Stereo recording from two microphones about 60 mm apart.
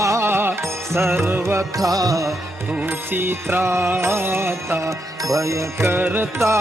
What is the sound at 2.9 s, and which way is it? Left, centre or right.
Music, right.